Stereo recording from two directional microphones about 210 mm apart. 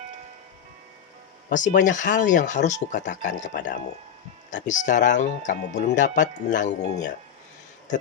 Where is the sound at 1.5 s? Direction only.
40° left (ahead or behind).